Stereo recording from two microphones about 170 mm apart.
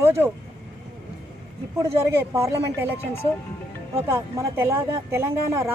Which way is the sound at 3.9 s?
15° right (ahead or behind).